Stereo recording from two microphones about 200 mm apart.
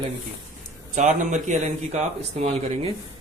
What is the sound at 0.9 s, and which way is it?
Speech, 40° right (ahead or behind).